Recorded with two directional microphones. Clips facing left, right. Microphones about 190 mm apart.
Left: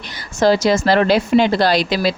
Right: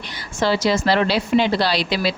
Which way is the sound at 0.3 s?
45° left (ahead or behind).